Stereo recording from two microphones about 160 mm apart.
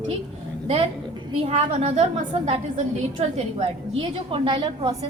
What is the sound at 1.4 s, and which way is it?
A woman's voice, 40° right (ahead or behind).